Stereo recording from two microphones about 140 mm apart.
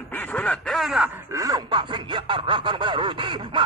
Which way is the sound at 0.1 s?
10° left (ahead or behind).